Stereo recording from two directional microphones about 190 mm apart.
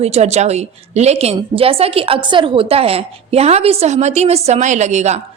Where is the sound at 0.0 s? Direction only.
35° right (ahead or behind).